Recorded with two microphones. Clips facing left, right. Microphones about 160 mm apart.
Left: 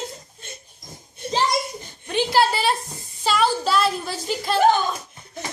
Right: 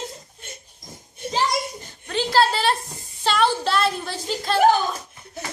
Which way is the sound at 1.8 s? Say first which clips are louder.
Left 2 dB; 15° left (ahead or behind).